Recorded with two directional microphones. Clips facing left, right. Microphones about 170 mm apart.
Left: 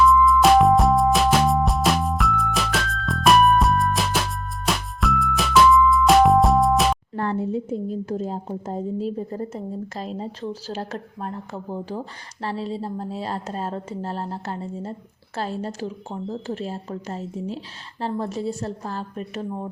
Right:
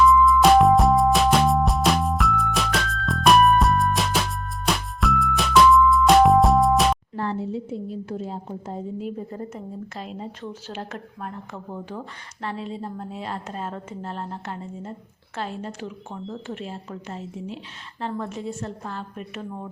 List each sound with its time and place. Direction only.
0.0 s music: centre (ahead or behind)
7.2 s a woman's voice: 55° left (ahead or behind); by 19.5 s 35° left (ahead or behind)